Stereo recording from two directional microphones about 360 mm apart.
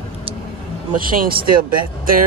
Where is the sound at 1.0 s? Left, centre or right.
Right.